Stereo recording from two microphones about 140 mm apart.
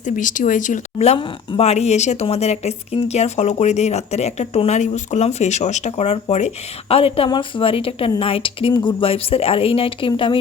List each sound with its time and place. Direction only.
0.0 s speech: 70° left (ahead or behind); by 10.3 s 40° left (ahead or behind)